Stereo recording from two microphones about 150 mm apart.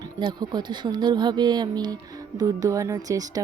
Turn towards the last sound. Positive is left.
turn(degrees=-25)  # may be behind; listen again after turning